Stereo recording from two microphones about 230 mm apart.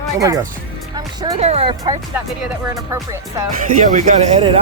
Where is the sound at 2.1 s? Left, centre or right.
Centre.